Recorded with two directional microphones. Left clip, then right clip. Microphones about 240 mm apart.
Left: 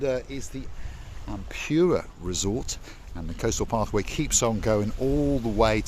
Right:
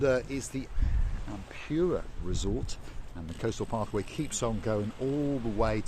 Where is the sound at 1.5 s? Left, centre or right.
Left.